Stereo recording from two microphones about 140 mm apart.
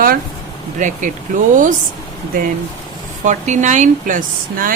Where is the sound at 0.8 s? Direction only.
65° right (ahead or behind).